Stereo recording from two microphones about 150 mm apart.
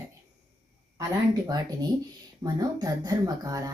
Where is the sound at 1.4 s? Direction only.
25° right (ahead or behind).